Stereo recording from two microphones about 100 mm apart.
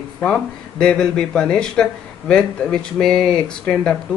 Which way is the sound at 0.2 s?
10° left (ahead or behind).